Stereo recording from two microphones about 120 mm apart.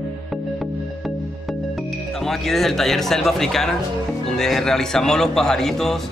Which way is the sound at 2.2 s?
Centre (ahead or behind).